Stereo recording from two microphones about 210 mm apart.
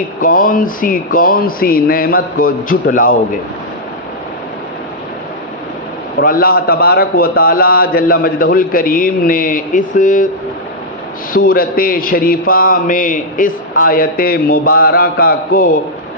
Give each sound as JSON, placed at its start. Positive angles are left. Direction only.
{"t": 0.2, "sound": "speech", "side_deg": 40}
{"t": 6.1, "sound": "a man's voice", "side_deg": 45}
{"t": 11.3, "sound": "a man's voice", "side_deg": 45}